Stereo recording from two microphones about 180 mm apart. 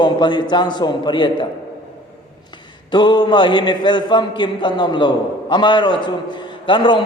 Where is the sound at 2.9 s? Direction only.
25° left (ahead or behind).